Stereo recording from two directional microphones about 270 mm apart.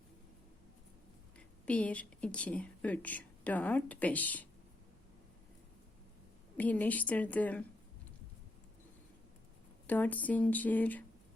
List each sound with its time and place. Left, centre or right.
1.6 s a woman's voice: centre
6.6 s a woman's voice: centre
9.8 s a woman's voice: centre